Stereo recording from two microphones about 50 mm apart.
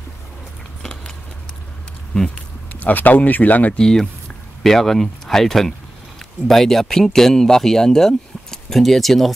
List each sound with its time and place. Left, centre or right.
2.7 s speech: left
3.7 s speech: centre